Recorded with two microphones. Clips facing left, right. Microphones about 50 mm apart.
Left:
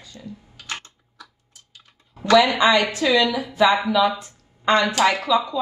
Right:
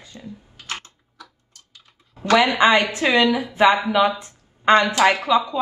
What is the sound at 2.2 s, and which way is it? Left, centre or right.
A woman's voice, right.